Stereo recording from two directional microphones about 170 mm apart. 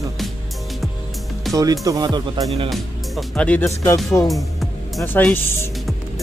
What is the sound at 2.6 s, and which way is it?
Speech, centre (ahead or behind).